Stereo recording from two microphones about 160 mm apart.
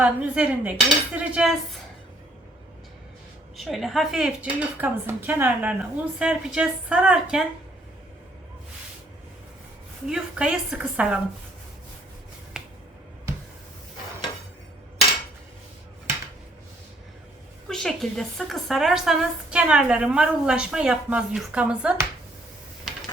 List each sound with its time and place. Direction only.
0.0 s cutlery: 10° right (ahead or behind)
3.6 s speech: centre (ahead or behind)
10.1 s speech: 5° right (ahead or behind)
12.6 s finger snapping: 5° right (ahead or behind)
17.7 s speech: centre (ahead or behind)